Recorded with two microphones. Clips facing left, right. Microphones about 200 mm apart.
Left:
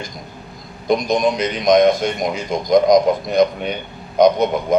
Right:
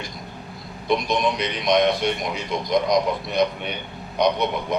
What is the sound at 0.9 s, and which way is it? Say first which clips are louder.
A man's voice: left 5 dB; 45° left (ahead or behind).